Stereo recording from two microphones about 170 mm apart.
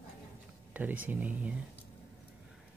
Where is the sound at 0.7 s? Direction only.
10° right (ahead or behind).